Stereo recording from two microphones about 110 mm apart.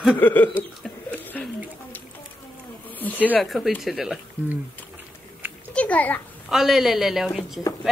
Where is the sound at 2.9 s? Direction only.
15° left (ahead or behind).